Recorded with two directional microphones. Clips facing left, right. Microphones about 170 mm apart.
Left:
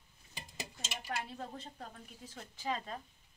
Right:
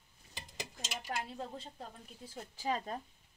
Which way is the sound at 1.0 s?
20° right (ahead or behind).